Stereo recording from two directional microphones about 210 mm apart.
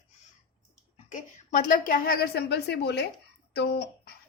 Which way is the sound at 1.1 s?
40° left (ahead or behind).